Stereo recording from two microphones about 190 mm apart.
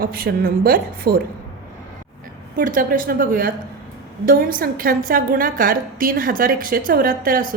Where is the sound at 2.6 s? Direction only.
45° right (ahead or behind).